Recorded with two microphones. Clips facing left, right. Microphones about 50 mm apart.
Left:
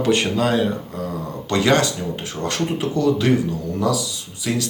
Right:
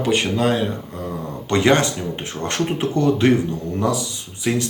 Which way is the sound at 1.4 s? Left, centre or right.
Right.